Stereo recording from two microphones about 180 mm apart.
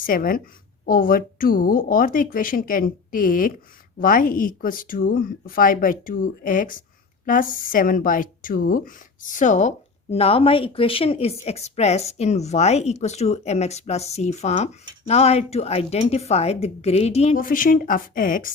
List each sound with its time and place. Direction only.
0.0 s speech: 50° left (ahead or behind); by 17.3 s 35° left (ahead or behind)
17.3 s speech: 50° left (ahead or behind)